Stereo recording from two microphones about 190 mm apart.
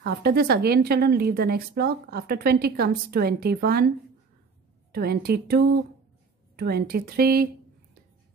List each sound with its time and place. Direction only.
0.0 s speech: 55° right (ahead or behind)
4.9 s a woman's voice: 55° right (ahead or behind)